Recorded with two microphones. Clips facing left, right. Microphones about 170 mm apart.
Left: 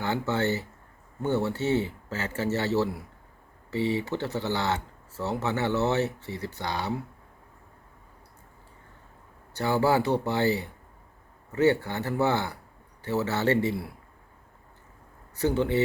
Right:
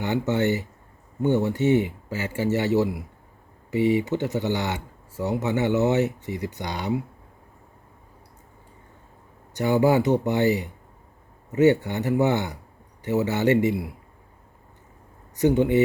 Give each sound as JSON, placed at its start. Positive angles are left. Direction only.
{"t": 0.0, "sound": "speech", "side_deg": -20}
{"t": 9.6, "sound": "speech", "side_deg": -20}
{"t": 15.4, "sound": "speech", "side_deg": -15}